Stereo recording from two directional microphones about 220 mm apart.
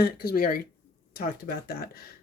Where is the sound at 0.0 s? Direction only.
45° left (ahead or behind).